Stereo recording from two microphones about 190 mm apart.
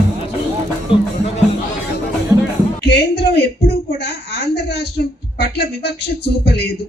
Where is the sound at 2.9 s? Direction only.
60° left (ahead or behind).